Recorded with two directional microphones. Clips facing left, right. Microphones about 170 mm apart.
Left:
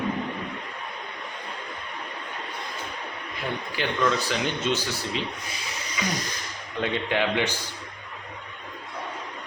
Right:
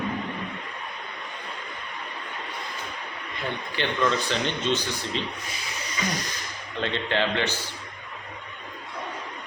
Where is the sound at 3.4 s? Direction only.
5° left (ahead or behind).